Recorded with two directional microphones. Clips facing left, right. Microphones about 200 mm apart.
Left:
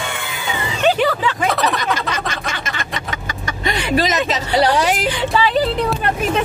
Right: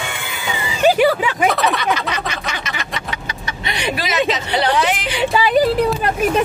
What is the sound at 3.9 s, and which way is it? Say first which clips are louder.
Vehicle: left 8 dB; 45° left (ahead or behind).